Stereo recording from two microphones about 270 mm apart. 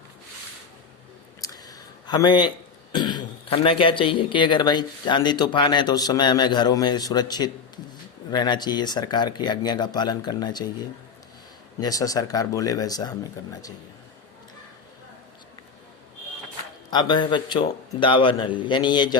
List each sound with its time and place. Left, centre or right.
1.4 s a sound: centre
2.9 s speech: centre
11.8 s speech: centre
16.9 s speech: centre